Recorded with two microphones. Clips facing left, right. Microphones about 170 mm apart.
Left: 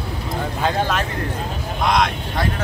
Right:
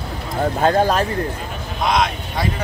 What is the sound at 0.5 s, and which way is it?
Speech, 40° right (ahead or behind).